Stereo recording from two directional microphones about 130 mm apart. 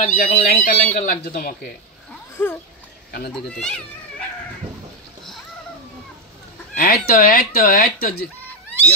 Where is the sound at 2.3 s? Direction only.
15° left (ahead or behind).